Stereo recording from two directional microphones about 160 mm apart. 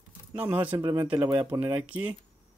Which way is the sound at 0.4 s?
10° right (ahead or behind).